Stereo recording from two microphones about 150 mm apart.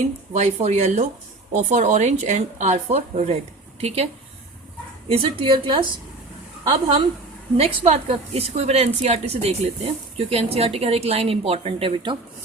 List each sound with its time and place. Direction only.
0.3 s a woman's voice: 50° right (ahead or behind)